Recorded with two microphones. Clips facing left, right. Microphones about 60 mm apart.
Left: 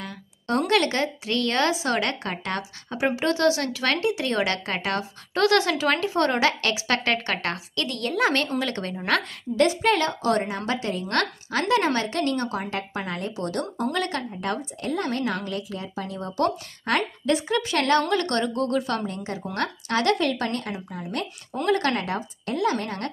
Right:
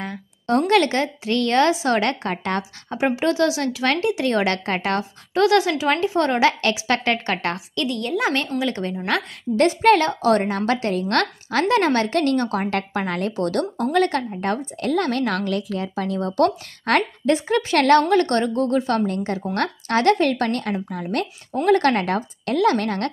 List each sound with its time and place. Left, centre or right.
0.0 s a sound: right
0.6 s a woman's voice: right
5.3 s a woman's voice: centre
9.6 s a woman's voice: right
13.9 s a woman's voice: right
14.8 s a woman's voice: right
17.3 s a woman's voice: right
17.7 s a woman's voice: right
19.0 s a woman's voice: right